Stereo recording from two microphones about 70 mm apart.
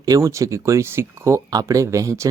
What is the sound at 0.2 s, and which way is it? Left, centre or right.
Speech, right.